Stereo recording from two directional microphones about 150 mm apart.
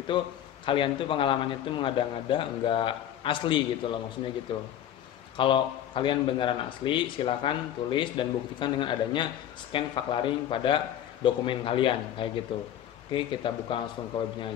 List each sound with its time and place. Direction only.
0.1 s speech: 35° left (ahead or behind)